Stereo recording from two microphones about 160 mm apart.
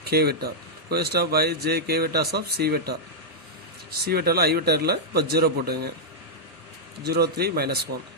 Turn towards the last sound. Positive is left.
turn(degrees=-80)